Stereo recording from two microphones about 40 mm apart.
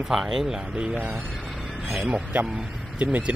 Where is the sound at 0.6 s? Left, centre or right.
Right.